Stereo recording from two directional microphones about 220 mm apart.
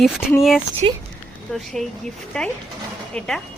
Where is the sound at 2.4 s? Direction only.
5° left (ahead or behind).